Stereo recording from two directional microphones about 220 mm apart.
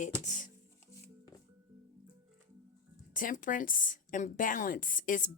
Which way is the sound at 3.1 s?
40° left (ahead or behind).